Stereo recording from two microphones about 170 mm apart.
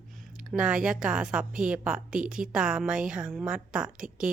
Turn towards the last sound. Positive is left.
turn(degrees=-5)  # may be behind; listen again after turning